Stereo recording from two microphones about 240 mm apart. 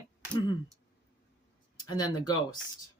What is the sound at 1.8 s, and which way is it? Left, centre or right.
Speech, centre.